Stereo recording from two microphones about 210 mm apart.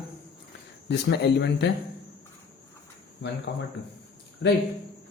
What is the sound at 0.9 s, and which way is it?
Speech, 55° left (ahead or behind).